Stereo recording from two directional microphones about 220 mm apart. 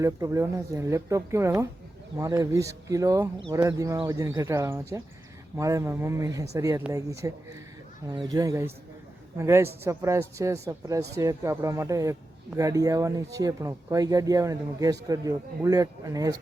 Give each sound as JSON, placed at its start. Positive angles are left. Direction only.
{"t": 0.0, "sound": "speech", "side_deg": -15}